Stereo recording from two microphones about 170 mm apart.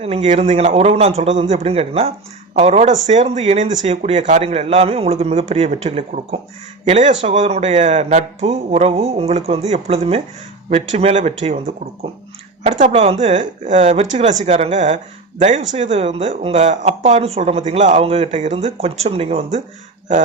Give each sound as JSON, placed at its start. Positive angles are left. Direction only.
{"t": 0.0, "sound": "speech", "side_deg": -35}
{"t": 12.8, "sound": "speech", "side_deg": -45}